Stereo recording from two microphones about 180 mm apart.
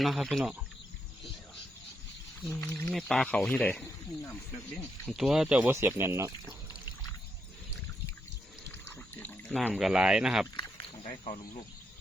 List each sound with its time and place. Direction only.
0.0 s speech: centre (ahead or behind)
2.5 s speech: 15° left (ahead or behind)
2.8 s speech: centre (ahead or behind)
4.7 s speech: centre (ahead or behind); by 6.6 s 15° right (ahead or behind)
8.7 s water: 10° left (ahead or behind)
9.5 s speech: 5° right (ahead or behind)
11.0 s speech: 40° left (ahead or behind)